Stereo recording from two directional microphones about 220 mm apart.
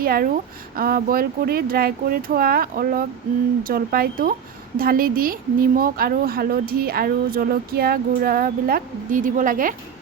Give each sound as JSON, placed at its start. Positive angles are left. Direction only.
{"t": 0.0, "sound": "speech", "side_deg": -40}